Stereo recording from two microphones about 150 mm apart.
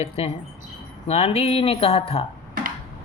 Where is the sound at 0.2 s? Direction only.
45° left (ahead or behind).